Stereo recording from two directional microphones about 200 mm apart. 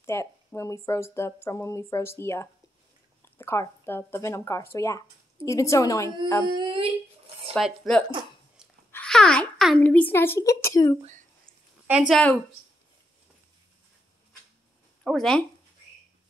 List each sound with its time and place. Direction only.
0.0 s speech: 15° left (ahead or behind)
6.4 s speech: 25° right (ahead or behind)
7.5 s a child's voice: centre (ahead or behind)
11.0 s speech: 40° right (ahead or behind)
12.1 s speech: 5° left (ahead or behind)
15.0 s speech: 5° left (ahead or behind)